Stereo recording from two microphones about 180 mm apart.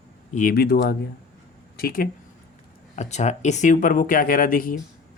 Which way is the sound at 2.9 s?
40° left (ahead or behind).